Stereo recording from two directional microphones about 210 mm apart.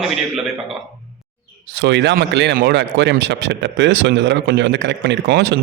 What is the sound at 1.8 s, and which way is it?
Speech, 55° right (ahead or behind).